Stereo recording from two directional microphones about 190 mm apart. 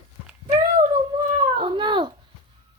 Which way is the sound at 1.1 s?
25° right (ahead or behind).